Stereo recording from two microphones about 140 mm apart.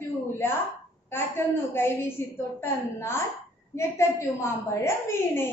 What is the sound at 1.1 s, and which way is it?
A woman's voice, 15° left (ahead or behind).